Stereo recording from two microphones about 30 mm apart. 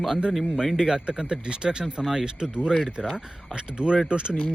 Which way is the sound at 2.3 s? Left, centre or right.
Right.